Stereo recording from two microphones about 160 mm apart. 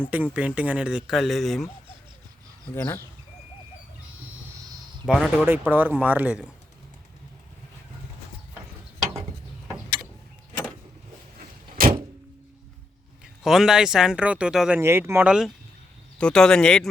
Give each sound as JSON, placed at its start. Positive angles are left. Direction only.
{"t": 0.1, "sound": "speech", "side_deg": -10}
{"t": 2.7, "sound": "speech", "side_deg": 15}
{"t": 5.0, "sound": "speech", "side_deg": -5}
{"t": 11.3, "sound": "vehicle", "side_deg": -65}
{"t": 13.2, "sound": "speech", "side_deg": 0}
{"t": 14.8, "sound": "speech", "side_deg": -15}